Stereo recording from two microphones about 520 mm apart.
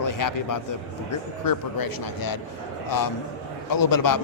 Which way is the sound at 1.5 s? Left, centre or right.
Left.